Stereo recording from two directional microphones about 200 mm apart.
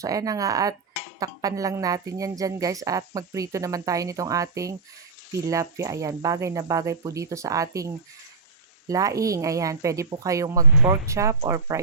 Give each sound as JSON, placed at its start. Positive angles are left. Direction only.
{"t": 0.0, "sound": "speech", "side_deg": -15}